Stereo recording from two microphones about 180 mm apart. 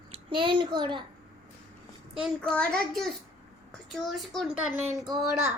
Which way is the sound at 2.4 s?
5° left (ahead or behind).